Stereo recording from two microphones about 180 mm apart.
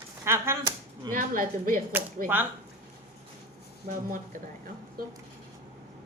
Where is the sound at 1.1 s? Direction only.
50° right (ahead or behind).